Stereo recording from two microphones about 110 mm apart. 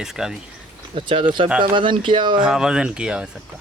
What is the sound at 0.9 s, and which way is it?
A man's voice, 55° right (ahead or behind).